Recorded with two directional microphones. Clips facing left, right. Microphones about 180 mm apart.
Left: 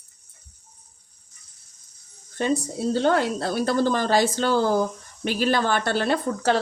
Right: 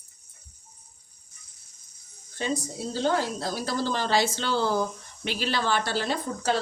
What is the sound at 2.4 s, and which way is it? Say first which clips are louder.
Speech: left 6 dB; 55° left (ahead or behind).